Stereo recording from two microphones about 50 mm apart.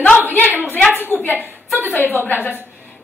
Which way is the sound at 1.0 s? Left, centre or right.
Left.